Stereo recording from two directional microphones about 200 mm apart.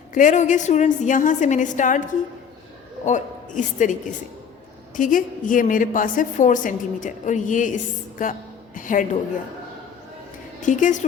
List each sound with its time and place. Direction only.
0.1 s a woman's voice: 40° left (ahead or behind)
3.1 s a woman's voice: 40° left (ahead or behind)
4.9 s a woman's voice: 40° left (ahead or behind)
10.6 s a woman's voice: 40° left (ahead or behind)